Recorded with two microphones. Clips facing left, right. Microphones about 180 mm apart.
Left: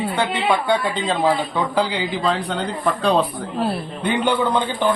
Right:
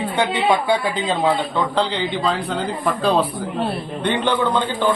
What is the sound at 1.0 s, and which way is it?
A man's voice, centre (ahead or behind).